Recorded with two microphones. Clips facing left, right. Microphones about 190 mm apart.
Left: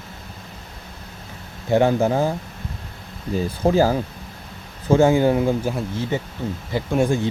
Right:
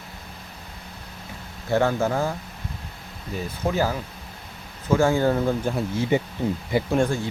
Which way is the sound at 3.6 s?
30° left (ahead or behind).